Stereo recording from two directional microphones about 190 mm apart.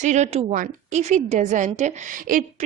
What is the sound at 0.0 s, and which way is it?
A woman's voice, 40° right (ahead or behind).